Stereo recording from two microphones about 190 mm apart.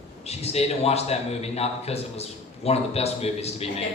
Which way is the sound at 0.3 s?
35° left (ahead or behind).